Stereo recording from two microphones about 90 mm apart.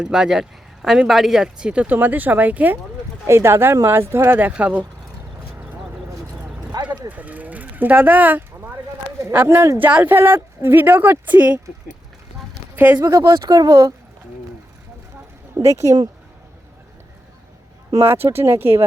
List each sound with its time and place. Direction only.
0.0 s speech: 5° right (ahead or behind)
3.2 s speech: 30° right (ahead or behind); by 4.9 s 15° right (ahead or behind)
5.4 s clip-clop: 15° right (ahead or behind)
6.4 s vehicle: 15° right (ahead or behind)
7.1 s a sound: 15° right (ahead or behind)
9.2 s speech: 25° right (ahead or behind)
9.7 s speech: 20° right (ahead or behind)
12.7 s speech: 20° right (ahead or behind)
13.0 s speech: 35° right (ahead or behind)
15.5 s speech: 35° right (ahead or behind)
18.0 s speech: 25° right (ahead or behind)